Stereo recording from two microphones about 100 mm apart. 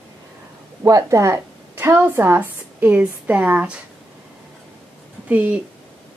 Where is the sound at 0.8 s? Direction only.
35° right (ahead or behind); by 3.8 s 15° right (ahead or behind).